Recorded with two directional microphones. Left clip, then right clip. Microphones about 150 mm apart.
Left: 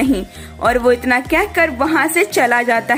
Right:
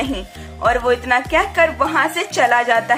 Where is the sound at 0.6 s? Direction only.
30° left (ahead or behind).